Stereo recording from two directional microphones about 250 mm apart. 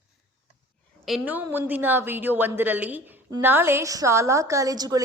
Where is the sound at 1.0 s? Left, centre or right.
Centre.